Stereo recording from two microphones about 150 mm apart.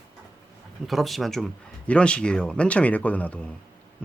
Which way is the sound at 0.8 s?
Centre (ahead or behind).